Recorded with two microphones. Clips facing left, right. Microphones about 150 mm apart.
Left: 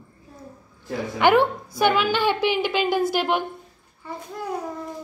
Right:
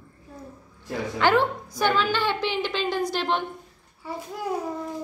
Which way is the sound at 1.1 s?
15° left (ahead or behind).